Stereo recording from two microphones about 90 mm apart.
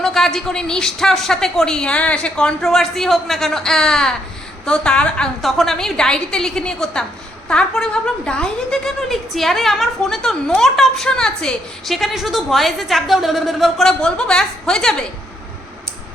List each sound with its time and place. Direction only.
0.0 s a woman's voice: 5° left (ahead or behind)
5.4 s a woman's voice: centre (ahead or behind)